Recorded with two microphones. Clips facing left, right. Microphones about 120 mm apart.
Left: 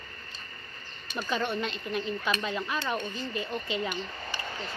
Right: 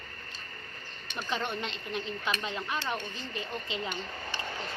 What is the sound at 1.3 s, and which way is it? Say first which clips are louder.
Speech: left 4 dB; 20° right (ahead or behind).